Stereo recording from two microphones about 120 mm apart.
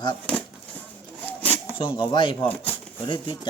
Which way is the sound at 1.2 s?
15° left (ahead or behind).